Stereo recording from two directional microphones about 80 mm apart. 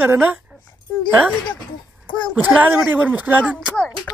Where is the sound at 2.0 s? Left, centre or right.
Left.